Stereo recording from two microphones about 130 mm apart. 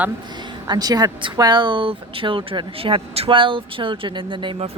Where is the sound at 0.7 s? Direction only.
30° right (ahead or behind).